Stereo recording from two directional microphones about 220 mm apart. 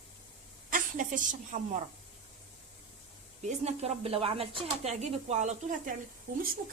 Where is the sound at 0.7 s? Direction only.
35° right (ahead or behind).